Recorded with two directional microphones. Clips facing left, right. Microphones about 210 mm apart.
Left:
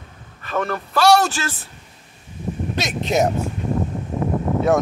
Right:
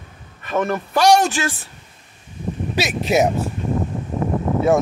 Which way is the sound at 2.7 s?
5° right (ahead or behind).